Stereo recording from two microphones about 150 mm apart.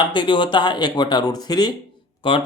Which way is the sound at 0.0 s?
30° left (ahead or behind).